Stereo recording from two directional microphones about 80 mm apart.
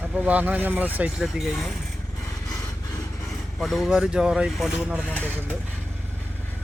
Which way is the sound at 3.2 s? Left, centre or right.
Centre.